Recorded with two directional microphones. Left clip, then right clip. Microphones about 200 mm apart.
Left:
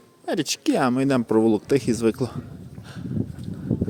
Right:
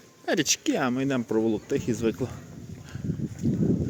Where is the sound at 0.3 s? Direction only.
15° left (ahead or behind).